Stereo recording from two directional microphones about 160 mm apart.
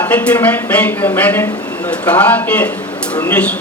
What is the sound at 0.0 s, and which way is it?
Speech, 10° left (ahead or behind).